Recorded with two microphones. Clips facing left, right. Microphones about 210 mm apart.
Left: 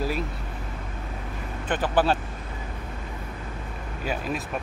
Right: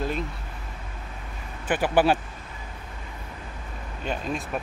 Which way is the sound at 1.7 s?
10° right (ahead or behind).